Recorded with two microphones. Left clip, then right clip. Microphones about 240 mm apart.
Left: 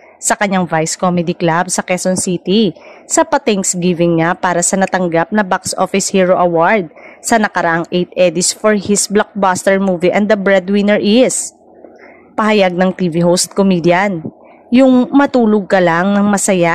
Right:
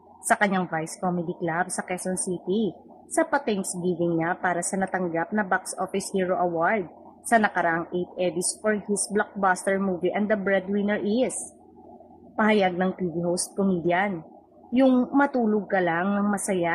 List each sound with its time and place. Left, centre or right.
0.3 s a woman's voice: left
12.4 s a woman's voice: left